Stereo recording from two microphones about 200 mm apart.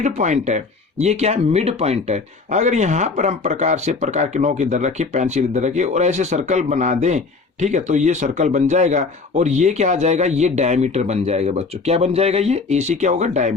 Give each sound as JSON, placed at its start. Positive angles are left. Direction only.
{"t": 0.0, "sound": "speech", "side_deg": -35}